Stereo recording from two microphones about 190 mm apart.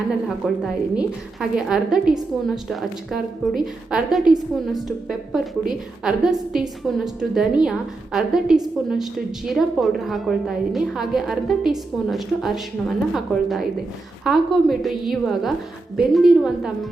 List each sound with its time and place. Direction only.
0.3 s a woman's voice: centre (ahead or behind)